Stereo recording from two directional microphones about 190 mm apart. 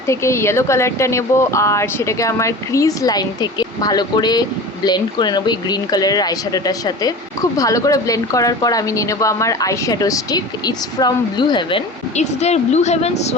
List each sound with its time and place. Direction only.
0.1 s speech: 15° left (ahead or behind)
12.1 s a woman's voice: 35° left (ahead or behind)